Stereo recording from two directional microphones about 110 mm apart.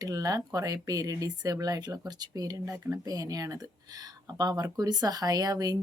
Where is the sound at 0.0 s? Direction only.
35° right (ahead or behind).